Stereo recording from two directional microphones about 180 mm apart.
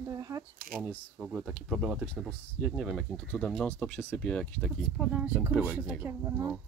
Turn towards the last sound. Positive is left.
turn(degrees=-10)  # may be behind; listen again after turning